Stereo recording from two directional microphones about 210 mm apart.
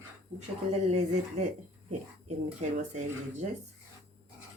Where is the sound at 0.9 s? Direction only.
30° right (ahead or behind).